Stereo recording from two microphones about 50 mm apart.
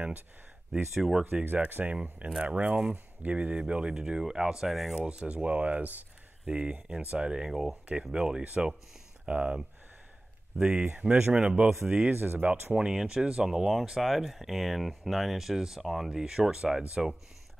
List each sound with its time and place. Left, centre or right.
0.9 s speech: centre
1.2 s speech: right; by 4.6 s centre
4.6 s speech: centre
4.9 s speech: right
6.4 s speech: right
10.6 s speech: centre
10.9 s speech: right
12.1 s speech: right
12.7 s speech: centre